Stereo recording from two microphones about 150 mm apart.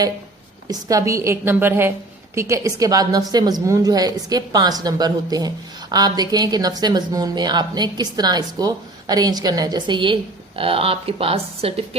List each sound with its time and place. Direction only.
0.7 s a woman's voice: 25° right (ahead or behind); by 11.9 s 40° right (ahead or behind)